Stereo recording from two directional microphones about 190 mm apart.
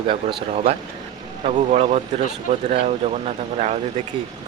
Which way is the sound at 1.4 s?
35° right (ahead or behind).